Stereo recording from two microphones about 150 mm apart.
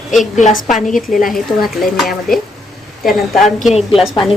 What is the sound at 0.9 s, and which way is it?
Speech, 60° left (ahead or behind).